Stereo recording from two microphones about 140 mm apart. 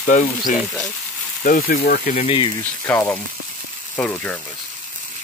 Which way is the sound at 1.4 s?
80° left.